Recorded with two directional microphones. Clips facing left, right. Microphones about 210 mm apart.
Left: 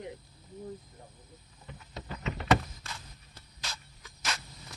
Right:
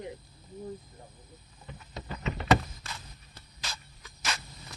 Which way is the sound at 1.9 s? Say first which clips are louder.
Right 2 dB; 30° right (ahead or behind).